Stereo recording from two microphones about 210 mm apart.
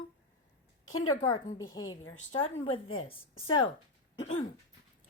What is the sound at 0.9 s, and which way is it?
A woman's voice, 20° left (ahead or behind).